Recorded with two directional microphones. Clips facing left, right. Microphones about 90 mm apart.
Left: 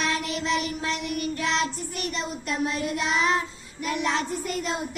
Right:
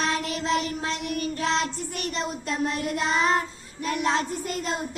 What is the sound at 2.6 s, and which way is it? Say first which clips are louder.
Child singing: right 1 dB; 45° right (ahead or behind).